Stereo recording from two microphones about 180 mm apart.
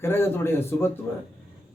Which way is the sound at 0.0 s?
15° left (ahead or behind).